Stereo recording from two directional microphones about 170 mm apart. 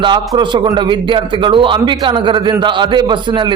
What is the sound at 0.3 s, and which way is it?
A man's voice, 25° right (ahead or behind).